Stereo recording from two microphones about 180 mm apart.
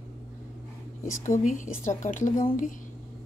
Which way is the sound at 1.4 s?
45° left (ahead or behind).